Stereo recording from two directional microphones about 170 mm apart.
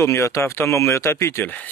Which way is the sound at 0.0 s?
15° left (ahead or behind).